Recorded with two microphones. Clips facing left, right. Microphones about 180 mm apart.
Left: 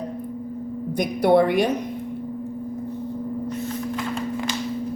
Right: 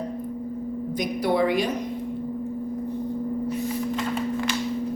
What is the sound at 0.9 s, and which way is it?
Speech, 60° left (ahead or behind).